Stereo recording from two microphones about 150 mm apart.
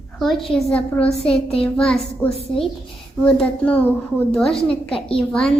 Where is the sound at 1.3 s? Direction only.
40° left (ahead or behind).